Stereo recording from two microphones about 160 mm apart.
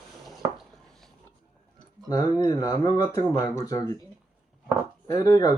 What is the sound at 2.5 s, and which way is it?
Speech, 25° left (ahead or behind).